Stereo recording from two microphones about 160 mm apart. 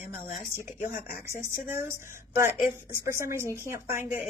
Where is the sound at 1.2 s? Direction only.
15° right (ahead or behind).